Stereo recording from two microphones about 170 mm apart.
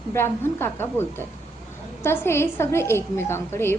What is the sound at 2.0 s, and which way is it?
A woman's voice, 15° left (ahead or behind).